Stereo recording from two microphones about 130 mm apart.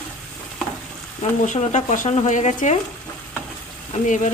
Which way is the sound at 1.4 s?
70° left (ahead or behind).